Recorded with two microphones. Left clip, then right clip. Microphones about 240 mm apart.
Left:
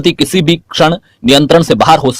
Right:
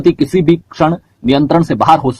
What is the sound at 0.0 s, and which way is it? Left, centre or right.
Speech, left.